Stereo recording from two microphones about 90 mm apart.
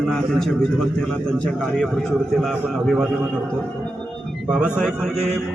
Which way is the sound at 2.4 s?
Centre (ahead or behind).